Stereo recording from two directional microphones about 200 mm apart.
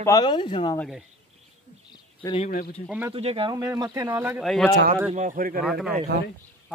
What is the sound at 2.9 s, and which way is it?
Speech, 10° right (ahead or behind).